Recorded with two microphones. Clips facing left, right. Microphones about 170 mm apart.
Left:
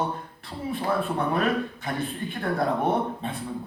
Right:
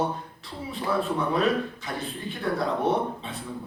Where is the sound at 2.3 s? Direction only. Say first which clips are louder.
Even; 55° left (ahead or behind).